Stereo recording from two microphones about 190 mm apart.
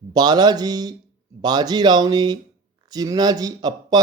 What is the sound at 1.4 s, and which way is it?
Speech, 20° right (ahead or behind).